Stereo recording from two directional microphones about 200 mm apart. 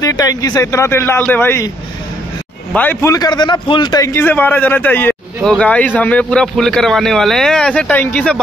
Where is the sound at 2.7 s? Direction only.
10° left (ahead or behind).